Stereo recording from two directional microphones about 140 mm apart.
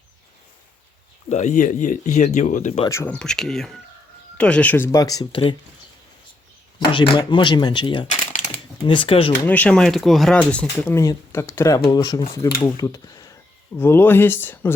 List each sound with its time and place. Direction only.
1.3 s speech: 60° left (ahead or behind)
2.9 s speech: 20° left (ahead or behind)
3.2 s speech: 5° left (ahead or behind)
4.9 s speech: 25° left (ahead or behind)
6.7 s speech: 35° left (ahead or behind)
8.0 s shuffling cards: 60° left (ahead or behind)
8.8 s speech: 40° left (ahead or behind)
9.4 s speech: 10° left (ahead or behind)
10.9 s speech: 20° left (ahead or behind)